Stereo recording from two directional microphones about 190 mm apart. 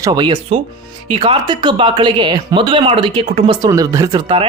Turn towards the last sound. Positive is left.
turn(degrees=-25)  # may be behind; listen again after turning